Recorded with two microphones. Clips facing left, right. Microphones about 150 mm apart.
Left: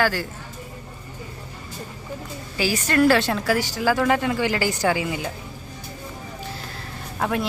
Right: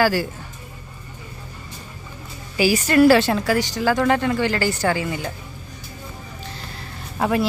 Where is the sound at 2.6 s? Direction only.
10° right (ahead or behind); by 5.3 s 10° left (ahead or behind).